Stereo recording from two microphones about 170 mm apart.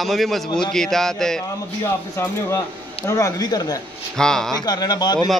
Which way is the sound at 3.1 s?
20° left (ahead or behind).